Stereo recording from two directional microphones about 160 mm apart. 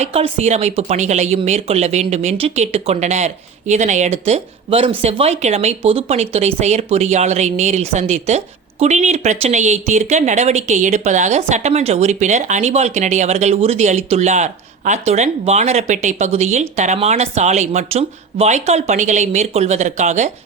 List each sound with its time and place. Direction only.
0.0 s speech: 40° right (ahead or behind)